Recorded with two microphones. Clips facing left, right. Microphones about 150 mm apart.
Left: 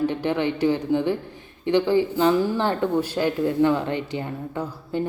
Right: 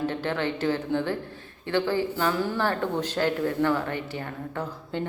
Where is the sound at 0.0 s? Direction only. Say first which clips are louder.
Left 5 dB; 15° left (ahead or behind).